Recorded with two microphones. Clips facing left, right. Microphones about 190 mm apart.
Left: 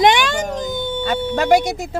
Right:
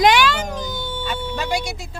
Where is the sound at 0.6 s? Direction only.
50° left (ahead or behind).